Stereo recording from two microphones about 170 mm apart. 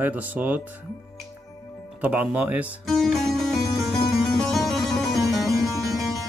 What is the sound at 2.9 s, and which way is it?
Music, centre (ahead or behind).